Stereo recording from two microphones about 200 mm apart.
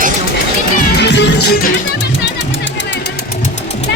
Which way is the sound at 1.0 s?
60° left (ahead or behind).